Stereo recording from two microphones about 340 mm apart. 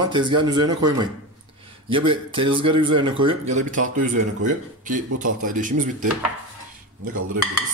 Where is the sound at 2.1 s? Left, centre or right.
Centre.